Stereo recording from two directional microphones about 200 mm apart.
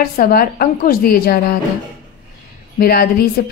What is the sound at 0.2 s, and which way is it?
A woman's voice, 45° left (ahead or behind).